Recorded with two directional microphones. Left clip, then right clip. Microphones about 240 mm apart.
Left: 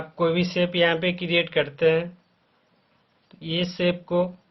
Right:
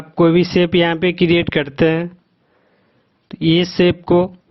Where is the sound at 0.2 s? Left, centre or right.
Right.